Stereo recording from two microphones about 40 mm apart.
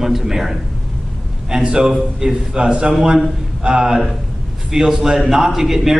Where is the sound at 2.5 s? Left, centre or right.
Right.